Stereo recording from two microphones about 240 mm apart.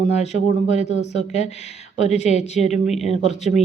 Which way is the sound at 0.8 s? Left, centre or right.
Left.